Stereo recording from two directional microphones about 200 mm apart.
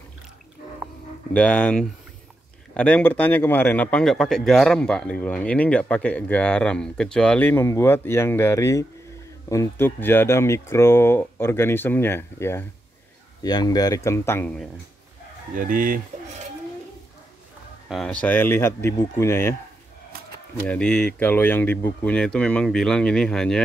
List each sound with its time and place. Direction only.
1.3 s speech: 5° left (ahead or behind)
15.5 s speech: 40° right (ahead or behind)
17.8 s speech: centre (ahead or behind)
20.5 s speech: 5° left (ahead or behind)